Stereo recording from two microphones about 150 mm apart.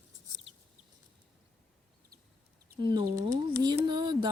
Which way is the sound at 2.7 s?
30° right (ahead or behind).